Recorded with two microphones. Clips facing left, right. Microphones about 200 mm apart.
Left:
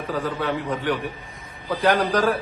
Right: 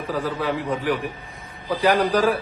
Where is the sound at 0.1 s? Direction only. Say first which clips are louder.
Right 1 dB; 10° right (ahead or behind).